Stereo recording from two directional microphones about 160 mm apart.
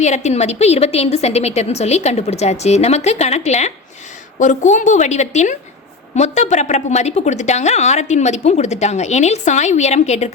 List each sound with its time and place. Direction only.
0.0 s a woman's voice: 45° left (ahead or behind)